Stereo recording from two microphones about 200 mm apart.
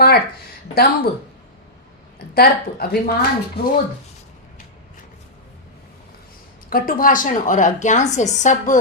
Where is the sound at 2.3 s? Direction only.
50° left (ahead or behind).